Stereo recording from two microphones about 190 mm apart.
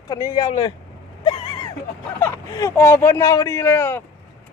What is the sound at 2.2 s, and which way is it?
Speech, 15° left (ahead or behind).